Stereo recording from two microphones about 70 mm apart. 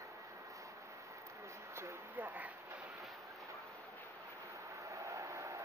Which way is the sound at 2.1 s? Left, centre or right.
Right.